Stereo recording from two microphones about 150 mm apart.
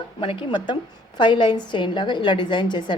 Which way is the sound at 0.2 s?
35° left (ahead or behind).